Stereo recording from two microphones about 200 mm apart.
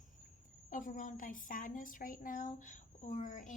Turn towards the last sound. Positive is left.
turn(degrees=40)  # may be behind; listen again after turning